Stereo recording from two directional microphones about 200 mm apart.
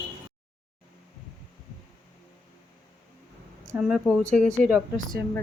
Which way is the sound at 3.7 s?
5° right (ahead or behind).